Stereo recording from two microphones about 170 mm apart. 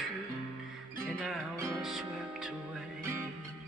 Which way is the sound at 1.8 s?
5° right (ahead or behind).